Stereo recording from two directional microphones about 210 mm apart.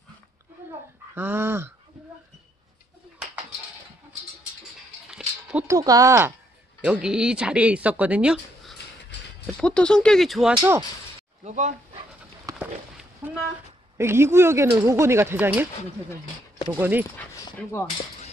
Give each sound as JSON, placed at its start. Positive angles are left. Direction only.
{"t": 1.1, "sound": "speech", "side_deg": -10}
{"t": 5.1, "sound": "a sound", "side_deg": -5}
{"t": 5.8, "sound": "speech", "side_deg": -15}
{"t": 10.6, "sound": "speech", "side_deg": -15}
{"t": 11.4, "sound": "speech", "side_deg": -35}
{"t": 13.2, "sound": "speech", "side_deg": -10}
{"t": 17.2, "sound": "speech", "side_deg": 10}